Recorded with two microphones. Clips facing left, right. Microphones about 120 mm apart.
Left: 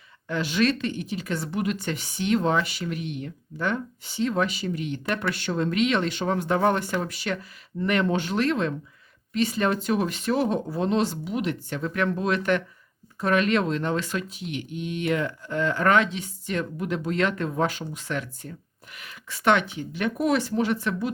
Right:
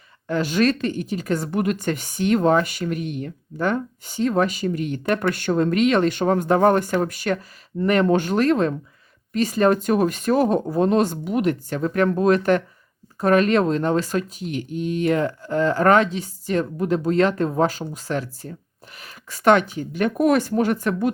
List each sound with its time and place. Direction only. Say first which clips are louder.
0.3 s a woman's voice: right 4 dB; 45° right (ahead or behind)